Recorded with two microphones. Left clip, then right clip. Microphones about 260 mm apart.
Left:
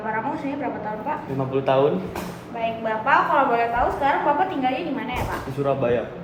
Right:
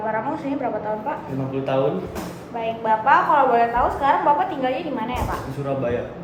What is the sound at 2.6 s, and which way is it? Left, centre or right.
A woman's voice, centre.